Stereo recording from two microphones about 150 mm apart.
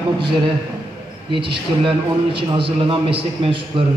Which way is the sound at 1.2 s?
35° right (ahead or behind).